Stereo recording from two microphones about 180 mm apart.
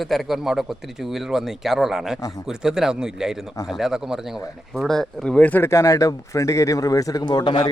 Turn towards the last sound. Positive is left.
turn(degrees=25)  # may be behind; listen again after turning